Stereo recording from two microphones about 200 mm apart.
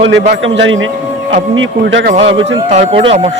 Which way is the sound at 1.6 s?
65° right (ahead or behind).